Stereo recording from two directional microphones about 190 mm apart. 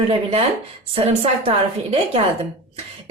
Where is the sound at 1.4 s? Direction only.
30° right (ahead or behind).